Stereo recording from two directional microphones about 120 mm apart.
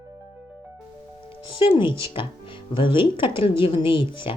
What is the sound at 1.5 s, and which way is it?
Speech, 45° left (ahead or behind).